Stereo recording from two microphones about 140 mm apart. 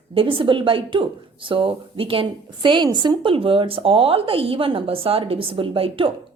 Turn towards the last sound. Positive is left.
turn(degrees=-40)  # may be behind; listen again after turning